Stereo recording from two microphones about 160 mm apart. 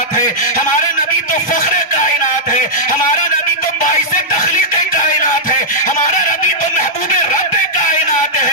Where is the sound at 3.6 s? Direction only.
55° left (ahead or behind).